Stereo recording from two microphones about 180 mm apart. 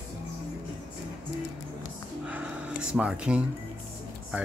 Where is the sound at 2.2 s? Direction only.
5° right (ahead or behind).